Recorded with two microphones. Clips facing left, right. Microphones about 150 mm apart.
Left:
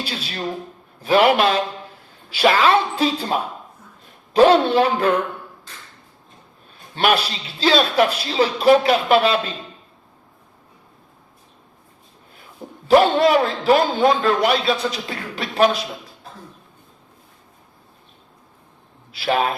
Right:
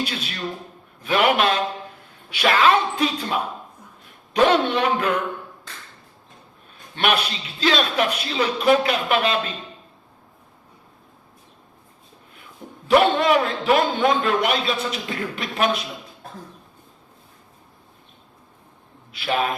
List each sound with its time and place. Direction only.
0.0 s a man's voice: 30° left (ahead or behind)
4.4 s a man's voice: 35° left (ahead or behind)
6.9 s a man's voice: 35° left (ahead or behind)
12.9 s a man's voice: 35° left (ahead or behind)
19.1 s a man's voice: 35° left (ahead or behind)